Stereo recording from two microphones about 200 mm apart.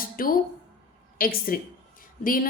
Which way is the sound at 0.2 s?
45° left (ahead or behind).